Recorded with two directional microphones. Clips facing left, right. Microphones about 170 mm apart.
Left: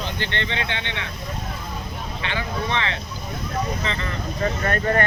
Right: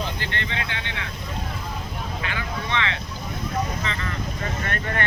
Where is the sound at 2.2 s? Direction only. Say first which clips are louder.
Left 6 dB; 30° left (ahead or behind).